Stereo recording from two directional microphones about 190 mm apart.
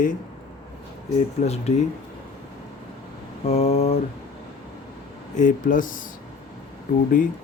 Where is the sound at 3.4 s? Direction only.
35° left (ahead or behind).